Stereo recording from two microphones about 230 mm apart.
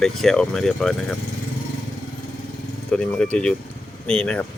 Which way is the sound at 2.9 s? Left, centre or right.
Centre.